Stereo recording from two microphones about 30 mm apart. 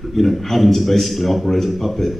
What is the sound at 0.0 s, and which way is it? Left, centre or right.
A man's voice, centre.